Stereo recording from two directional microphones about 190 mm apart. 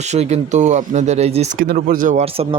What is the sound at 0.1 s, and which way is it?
Speech, 35° right (ahead or behind).